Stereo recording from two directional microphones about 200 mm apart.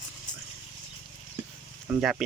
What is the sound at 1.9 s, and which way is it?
Speech, centre (ahead or behind).